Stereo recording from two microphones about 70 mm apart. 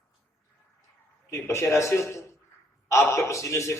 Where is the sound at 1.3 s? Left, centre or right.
Left.